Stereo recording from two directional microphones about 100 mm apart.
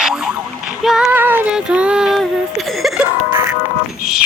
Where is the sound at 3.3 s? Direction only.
25° right (ahead or behind).